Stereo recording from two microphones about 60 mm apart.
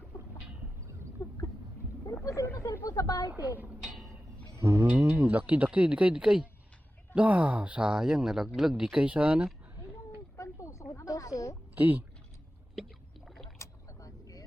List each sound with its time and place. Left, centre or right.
1.2 s a sound: left
2.2 s a woman's voice: left
3.2 s a woman's voice: right
4.5 s music: right
5.0 s speech: right; by 6.5 s centre
7.1 s speech: right
10.3 s a sound: left
10.9 s speech: left
11.7 s speech: right
13.2 s boat: centre
13.6 s vehicle: left